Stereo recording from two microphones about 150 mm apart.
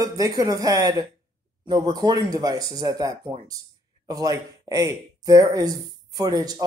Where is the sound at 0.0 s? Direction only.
25° right (ahead or behind).